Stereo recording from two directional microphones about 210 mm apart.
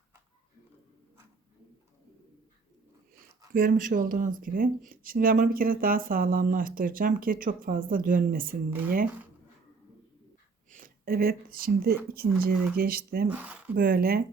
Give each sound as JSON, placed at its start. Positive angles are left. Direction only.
{"t": 3.5, "sound": "speech", "side_deg": -40}
{"t": 10.7, "sound": "speech", "side_deg": -40}
{"t": 13.2, "sound": "speech", "side_deg": -10}
{"t": 13.7, "sound": "speech", "side_deg": -45}